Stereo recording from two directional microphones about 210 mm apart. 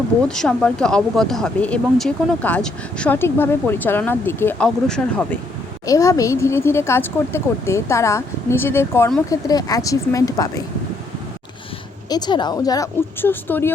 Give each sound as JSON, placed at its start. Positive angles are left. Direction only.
{"t": 0.3, "sound": "speech", "side_deg": 5}
{"t": 5.8, "sound": "speech", "side_deg": 15}
{"t": 12.0, "sound": "speech", "side_deg": 20}